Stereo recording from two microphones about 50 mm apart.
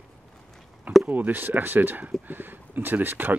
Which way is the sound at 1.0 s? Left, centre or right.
Right.